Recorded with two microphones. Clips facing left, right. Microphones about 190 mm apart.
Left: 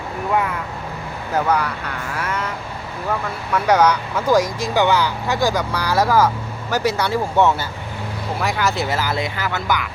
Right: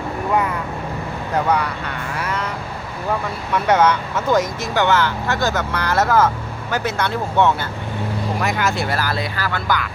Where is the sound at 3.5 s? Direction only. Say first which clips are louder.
Even; 10° left (ahead or behind).